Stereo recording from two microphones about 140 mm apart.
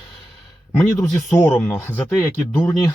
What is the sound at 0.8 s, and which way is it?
Speech, 10° left (ahead or behind).